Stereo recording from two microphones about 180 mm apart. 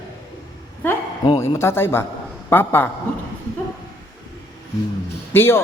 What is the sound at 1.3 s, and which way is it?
Speech, 15° left (ahead or behind).